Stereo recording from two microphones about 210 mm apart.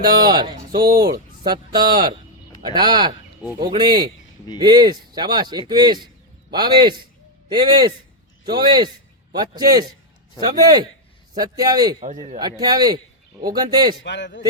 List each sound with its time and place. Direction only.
0.3 s a man's voice: 20° right (ahead or behind)
14.0 s a man's voice: 55° left (ahead or behind)